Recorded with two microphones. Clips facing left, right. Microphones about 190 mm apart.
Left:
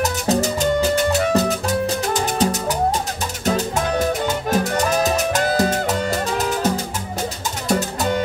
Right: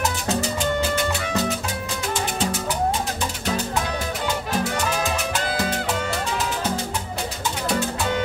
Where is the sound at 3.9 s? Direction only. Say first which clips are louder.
Left 6 dB; 45° left (ahead or behind).